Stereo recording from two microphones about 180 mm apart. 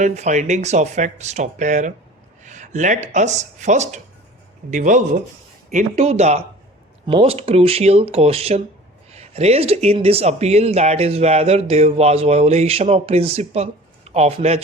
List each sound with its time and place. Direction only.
0.0 s speech: 40° right (ahead or behind)